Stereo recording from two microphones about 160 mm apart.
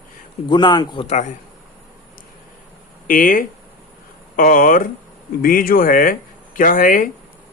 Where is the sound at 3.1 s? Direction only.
60° left (ahead or behind).